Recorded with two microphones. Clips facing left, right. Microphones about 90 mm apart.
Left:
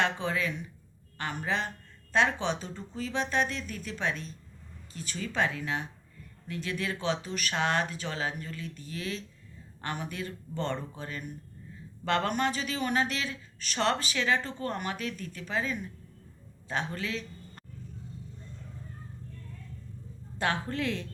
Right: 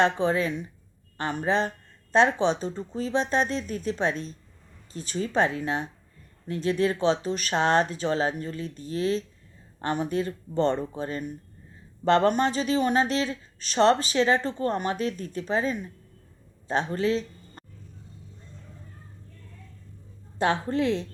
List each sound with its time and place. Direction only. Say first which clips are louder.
0.0 s speech: right 7 dB; 35° right (ahead or behind)
20.4 s a woman's voice: right 6 dB; 25° right (ahead or behind)